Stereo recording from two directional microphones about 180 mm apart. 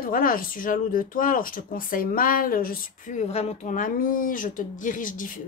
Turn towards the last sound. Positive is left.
turn(degrees=45)  # may be behind; listen again after turning